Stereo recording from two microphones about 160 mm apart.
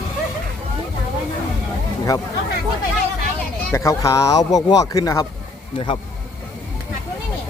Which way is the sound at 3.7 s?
20° left (ahead or behind).